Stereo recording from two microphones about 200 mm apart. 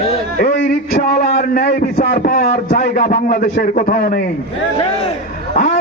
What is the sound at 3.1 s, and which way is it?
A man's voice, 45° left (ahead or behind).